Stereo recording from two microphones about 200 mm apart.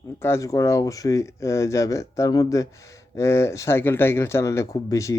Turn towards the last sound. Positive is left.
turn(degrees=15)  # may be behind; listen again after turning